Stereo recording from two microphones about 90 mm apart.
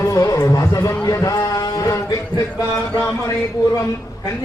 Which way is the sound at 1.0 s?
40° left (ahead or behind).